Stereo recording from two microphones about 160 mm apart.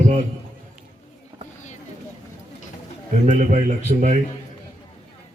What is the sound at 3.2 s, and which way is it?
Speech, 45° right (ahead or behind).